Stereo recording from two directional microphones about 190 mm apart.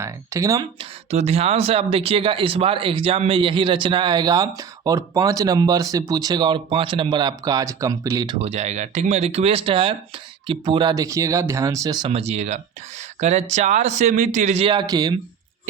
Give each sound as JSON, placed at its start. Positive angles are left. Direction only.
{"t": 0.0, "sound": "speech", "side_deg": -15}
{"t": 1.1, "sound": "speech", "side_deg": -35}
{"t": 8.4, "sound": "a man's voice", "side_deg": -35}